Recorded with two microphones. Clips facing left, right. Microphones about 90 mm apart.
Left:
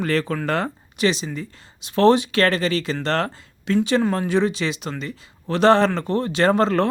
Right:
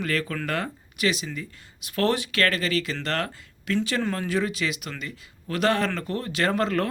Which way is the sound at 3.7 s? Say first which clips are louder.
Left 7 dB; 20° left (ahead or behind).